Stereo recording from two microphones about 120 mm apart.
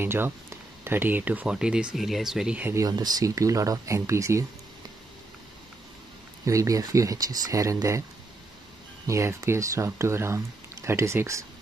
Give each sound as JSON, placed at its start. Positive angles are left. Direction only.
{"t": 0.0, "sound": "speech", "side_deg": -20}
{"t": 2.6, "sound": "speech", "side_deg": -25}
{"t": 6.4, "sound": "speech", "side_deg": -25}
{"t": 9.0, "sound": "speech", "side_deg": -25}